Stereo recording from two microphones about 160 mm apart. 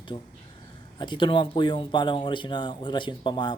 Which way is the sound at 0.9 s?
30° left (ahead or behind).